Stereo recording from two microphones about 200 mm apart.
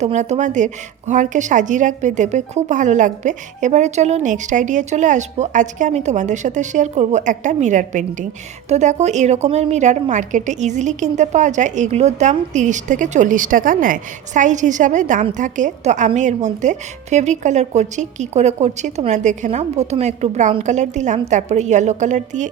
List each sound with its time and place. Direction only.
0.0 s a woman's voice: 35° right (ahead or behind)